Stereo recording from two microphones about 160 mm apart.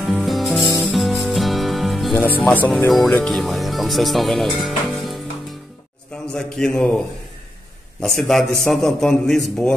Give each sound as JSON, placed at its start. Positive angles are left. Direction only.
{"t": 0.0, "sound": "music", "side_deg": 0}
{"t": 2.1, "sound": "speech", "side_deg": 10}
{"t": 6.3, "sound": "a man's voice", "side_deg": 5}
{"t": 8.0, "sound": "a man's voice", "side_deg": 0}